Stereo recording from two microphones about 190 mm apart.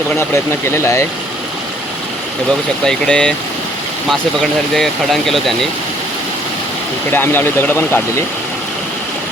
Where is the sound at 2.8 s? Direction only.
5° left (ahead or behind).